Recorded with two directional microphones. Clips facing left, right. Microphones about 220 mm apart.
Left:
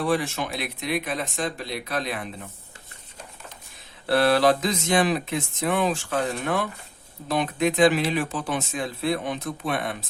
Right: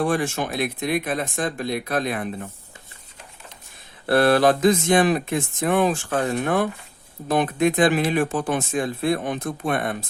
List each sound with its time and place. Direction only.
0.0 s speech: 50° right (ahead or behind)
4.1 s speech: 50° right (ahead or behind)